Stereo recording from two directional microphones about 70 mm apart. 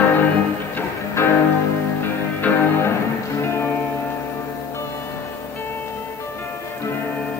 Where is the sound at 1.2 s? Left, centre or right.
Left.